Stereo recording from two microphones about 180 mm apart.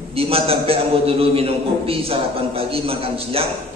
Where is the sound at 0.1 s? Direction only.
30° right (ahead or behind).